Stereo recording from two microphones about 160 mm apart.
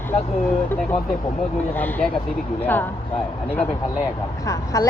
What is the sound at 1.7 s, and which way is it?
A woman's voice, 10° left (ahead or behind).